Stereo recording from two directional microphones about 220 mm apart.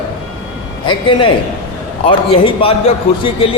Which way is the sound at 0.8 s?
20° left (ahead or behind).